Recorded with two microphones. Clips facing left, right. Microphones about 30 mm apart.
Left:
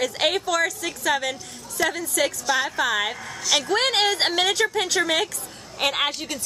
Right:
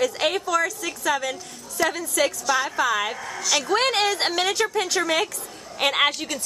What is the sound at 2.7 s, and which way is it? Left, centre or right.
Speech, left.